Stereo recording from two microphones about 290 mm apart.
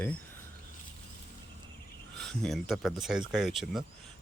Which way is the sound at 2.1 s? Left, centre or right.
Centre.